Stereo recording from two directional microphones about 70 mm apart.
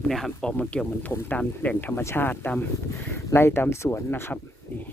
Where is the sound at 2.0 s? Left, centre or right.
Left.